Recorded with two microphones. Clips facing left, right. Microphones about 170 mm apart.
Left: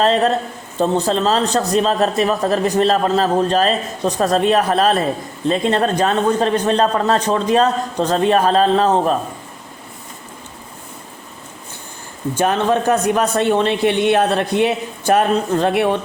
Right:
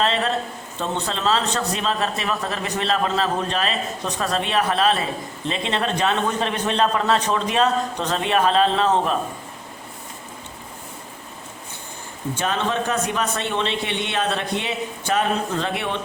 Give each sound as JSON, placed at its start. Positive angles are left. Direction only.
{"t": 0.0, "sound": "speech", "side_deg": 40}
{"t": 12.4, "sound": "speech", "side_deg": 50}